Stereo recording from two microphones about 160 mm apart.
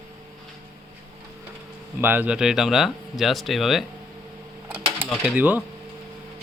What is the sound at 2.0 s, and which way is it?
Speech, 10° right (ahead or behind).